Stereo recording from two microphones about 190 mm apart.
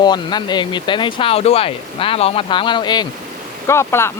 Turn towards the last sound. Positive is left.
turn(degrees=15)  # may be behind; listen again after turning